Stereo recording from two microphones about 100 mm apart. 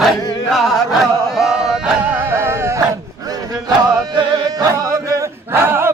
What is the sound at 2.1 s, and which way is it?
Music, 20° right (ahead or behind).